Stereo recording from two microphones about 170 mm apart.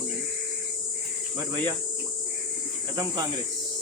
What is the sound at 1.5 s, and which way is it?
Speech, 25° right (ahead or behind).